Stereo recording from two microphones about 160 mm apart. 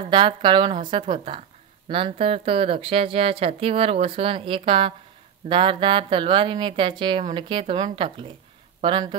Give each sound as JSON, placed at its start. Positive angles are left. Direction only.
{"t": 0.0, "sound": "a woman's voice", "side_deg": -30}